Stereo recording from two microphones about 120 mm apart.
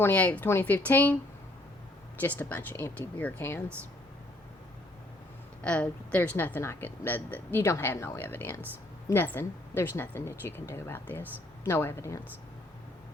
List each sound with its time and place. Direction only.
0.0 s speech: 10° left (ahead or behind)
2.2 s speech: 15° left (ahead or behind)
5.6 s a woman's voice: 10° left (ahead or behind)